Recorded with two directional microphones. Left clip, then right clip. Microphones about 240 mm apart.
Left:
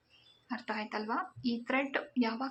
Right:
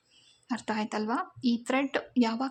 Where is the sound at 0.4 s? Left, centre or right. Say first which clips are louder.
Right 5 dB; right.